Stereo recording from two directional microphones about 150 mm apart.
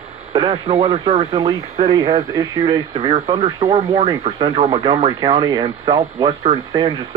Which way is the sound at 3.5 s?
25° right (ahead or behind).